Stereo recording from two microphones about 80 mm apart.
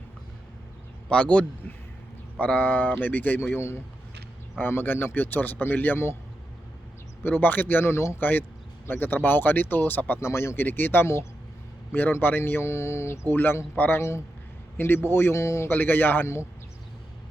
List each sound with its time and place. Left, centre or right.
1.1 s a man's voice: centre; by 6.1 s left
7.2 s speech: left
10.2 s speech: left
15.7 s speech: left